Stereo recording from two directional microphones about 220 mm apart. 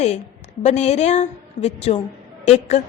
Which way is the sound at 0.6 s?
30° left (ahead or behind).